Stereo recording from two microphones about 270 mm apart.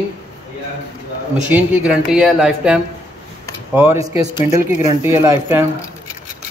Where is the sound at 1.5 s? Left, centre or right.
Centre.